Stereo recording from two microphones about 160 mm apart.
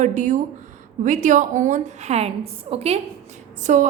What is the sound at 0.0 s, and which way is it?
A woman's voice, 50° right (ahead or behind).